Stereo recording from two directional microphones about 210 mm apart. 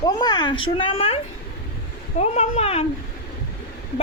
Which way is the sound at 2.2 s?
30° left (ahead or behind).